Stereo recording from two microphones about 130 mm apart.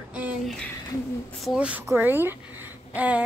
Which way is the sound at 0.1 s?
10° right (ahead or behind).